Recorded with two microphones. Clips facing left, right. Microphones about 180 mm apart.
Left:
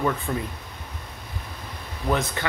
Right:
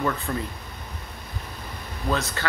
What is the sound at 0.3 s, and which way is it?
Speech, 10° left (ahead or behind).